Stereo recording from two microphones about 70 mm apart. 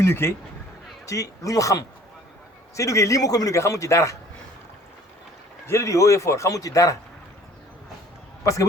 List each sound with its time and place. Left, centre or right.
0.0 s speech: left
1.0 s a man's voice: left
3.6 s a man's voice: left
5.6 s a man's voice: left